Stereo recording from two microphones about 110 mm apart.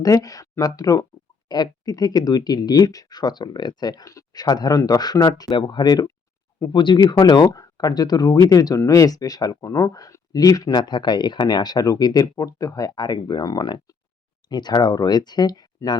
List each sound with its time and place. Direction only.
0.0 s speech: 35° left (ahead or behind)